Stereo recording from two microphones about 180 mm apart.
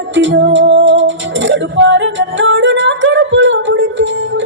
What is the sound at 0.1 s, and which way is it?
Music, 90° right.